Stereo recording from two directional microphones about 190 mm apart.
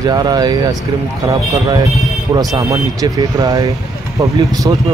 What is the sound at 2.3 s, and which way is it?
Speech, 20° right (ahead or behind).